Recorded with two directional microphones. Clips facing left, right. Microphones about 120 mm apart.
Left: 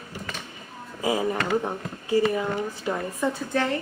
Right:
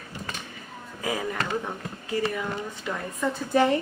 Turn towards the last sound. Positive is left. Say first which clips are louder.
# right 4 dB
turn(degrees=-15)  # may be behind; listen again after turning